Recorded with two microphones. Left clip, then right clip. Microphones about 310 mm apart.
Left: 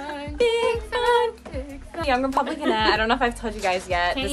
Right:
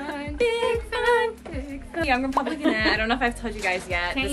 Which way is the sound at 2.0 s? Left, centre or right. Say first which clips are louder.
Left 1 dB; centre.